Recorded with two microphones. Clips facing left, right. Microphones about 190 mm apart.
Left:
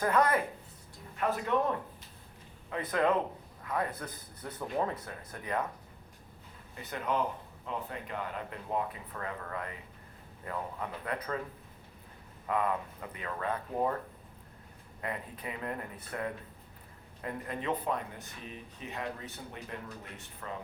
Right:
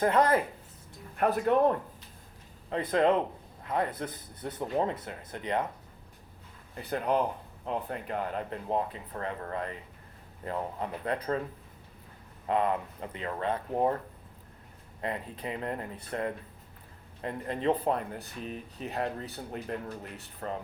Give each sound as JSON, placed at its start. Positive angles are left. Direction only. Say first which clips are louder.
{"t": 0.0, "sound": "speech", "louder": "right 3 dB", "side_deg": -30}
{"t": 1.1, "sound": "speech", "louder": "right 6 dB", "side_deg": -55}
{"t": 2.6, "sound": "speech", "louder": "right 4 dB", "side_deg": -30}
{"t": 6.7, "sound": "speech", "louder": "right 5 dB", "side_deg": -35}
{"t": 12.5, "sound": "speech", "louder": "right 3 dB", "side_deg": -30}
{"t": 15.0, "sound": "speech", "louder": "right 4 dB", "side_deg": -30}